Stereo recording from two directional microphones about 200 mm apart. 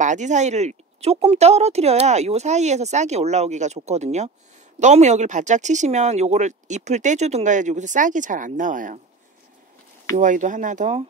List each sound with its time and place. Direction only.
0.0 s speech: 35° right (ahead or behind)
10.1 s speech: 40° right (ahead or behind)